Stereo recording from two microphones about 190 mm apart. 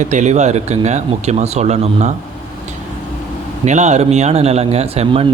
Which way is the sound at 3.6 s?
40° right (ahead or behind).